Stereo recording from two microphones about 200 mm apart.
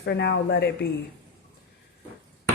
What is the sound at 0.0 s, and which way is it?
Speech, 60° left (ahead or behind).